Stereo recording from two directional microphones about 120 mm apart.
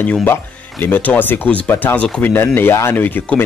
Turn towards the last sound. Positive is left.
turn(degrees=15)  # may be behind; listen again after turning